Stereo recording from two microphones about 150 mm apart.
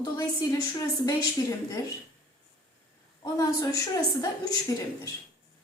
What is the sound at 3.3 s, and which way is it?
Speech, 25° left (ahead or behind).